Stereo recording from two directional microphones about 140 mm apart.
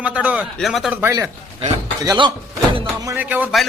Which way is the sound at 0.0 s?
10° right (ahead or behind).